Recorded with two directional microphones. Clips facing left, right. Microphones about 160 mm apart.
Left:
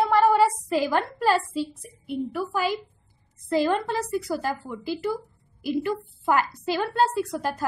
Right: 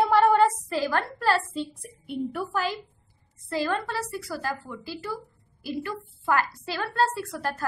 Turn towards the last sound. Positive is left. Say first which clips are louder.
# left 4 dB
turn(degrees=15)  # may be behind; listen again after turning